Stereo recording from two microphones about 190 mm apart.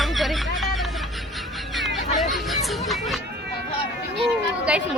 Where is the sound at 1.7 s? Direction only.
Centre (ahead or behind).